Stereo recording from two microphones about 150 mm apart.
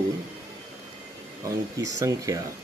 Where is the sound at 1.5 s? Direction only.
20° right (ahead or behind).